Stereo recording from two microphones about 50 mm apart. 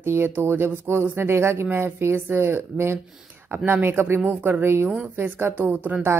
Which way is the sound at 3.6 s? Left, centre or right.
Right.